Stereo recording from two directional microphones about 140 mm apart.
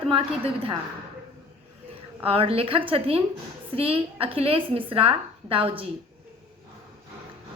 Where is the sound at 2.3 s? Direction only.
45° right (ahead or behind).